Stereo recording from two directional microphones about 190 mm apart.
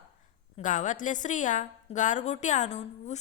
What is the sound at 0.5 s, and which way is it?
A woman's voice, 40° left (ahead or behind).